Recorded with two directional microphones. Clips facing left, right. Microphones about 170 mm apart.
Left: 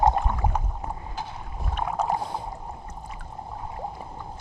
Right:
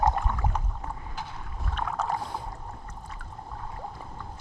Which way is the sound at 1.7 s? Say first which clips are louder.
Left 4 dB; 15° left (ahead or behind).